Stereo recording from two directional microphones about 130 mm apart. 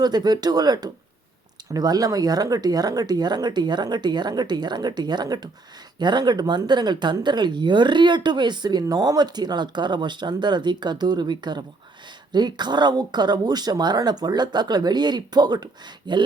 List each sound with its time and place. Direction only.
0.0 s speech: 30° right (ahead or behind)